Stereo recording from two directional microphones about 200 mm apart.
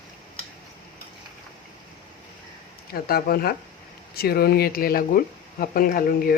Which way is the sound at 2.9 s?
50° left (ahead or behind).